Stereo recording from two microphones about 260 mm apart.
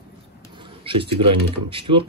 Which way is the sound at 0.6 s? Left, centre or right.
Centre.